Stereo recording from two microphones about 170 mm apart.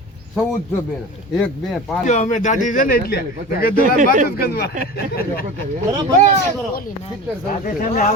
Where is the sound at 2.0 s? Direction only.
45° left (ahead or behind).